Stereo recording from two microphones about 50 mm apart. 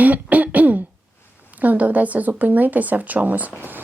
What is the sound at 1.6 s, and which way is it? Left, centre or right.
A woman's voice, right.